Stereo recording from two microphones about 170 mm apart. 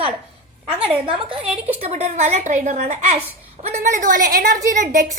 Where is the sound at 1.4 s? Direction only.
5° right (ahead or behind).